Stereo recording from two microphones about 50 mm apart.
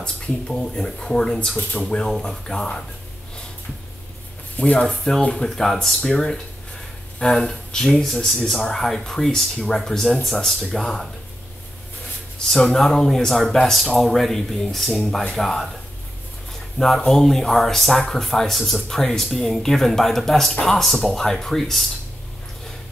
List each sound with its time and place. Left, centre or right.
0.0 s speech: centre
2.0 s speech: centre
4.6 s speech: left
4.8 s speech: centre
12.7 s speech: centre
16.7 s speech: centre